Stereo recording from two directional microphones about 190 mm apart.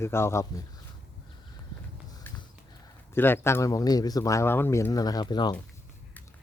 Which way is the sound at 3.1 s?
10° left (ahead or behind).